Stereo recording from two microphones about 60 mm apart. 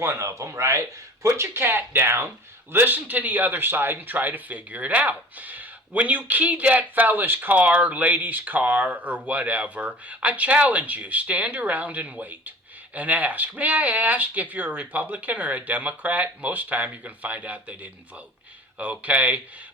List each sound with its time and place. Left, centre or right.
0.0 s speech: right
1.6 s speech: right
2.7 s speech: right